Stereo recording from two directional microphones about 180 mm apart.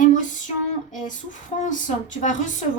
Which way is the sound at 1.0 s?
45° left (ahead or behind).